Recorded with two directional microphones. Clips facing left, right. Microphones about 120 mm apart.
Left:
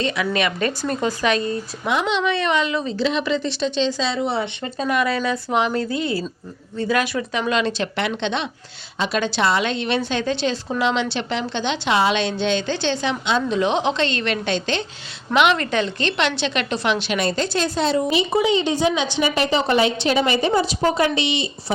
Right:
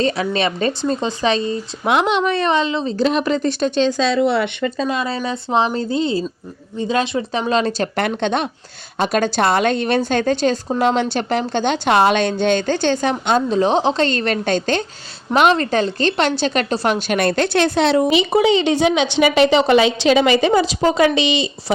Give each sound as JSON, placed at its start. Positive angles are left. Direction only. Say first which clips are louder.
{"t": 0.0, "sound": "speech", "louder": "right 3 dB", "side_deg": -35}
{"t": 1.9, "sound": "speech", "louder": "right 5 dB", "side_deg": -60}
{"t": 2.2, "sound": "speech", "louder": "right 3 dB", "side_deg": -40}
{"t": 2.9, "sound": "a woman's voice", "louder": "right 5 dB", "side_deg": -45}
{"t": 4.2, "sound": "a woman's voice", "louder": "right 6 dB", "side_deg": -75}
{"t": 4.8, "sound": "a woman's voice", "louder": "left 3 dB", "side_deg": -30}